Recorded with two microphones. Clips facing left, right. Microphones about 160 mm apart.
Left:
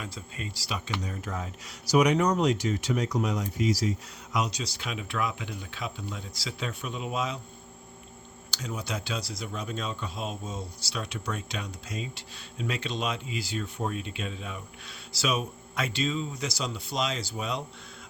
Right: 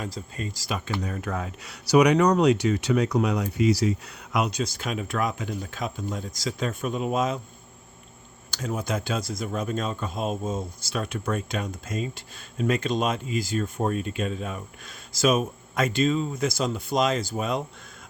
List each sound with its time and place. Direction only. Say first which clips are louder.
0.0 s speech: right 5 dB; 40° right (ahead or behind)
1.1 s speech: right 5 dB; 65° right (ahead or behind); by 7.3 s 45° right (ahead or behind)
8.4 s speech: right 6 dB; 50° right (ahead or behind)